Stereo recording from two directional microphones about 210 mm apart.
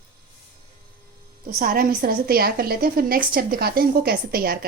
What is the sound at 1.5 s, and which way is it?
A woman's voice, 45° right (ahead or behind).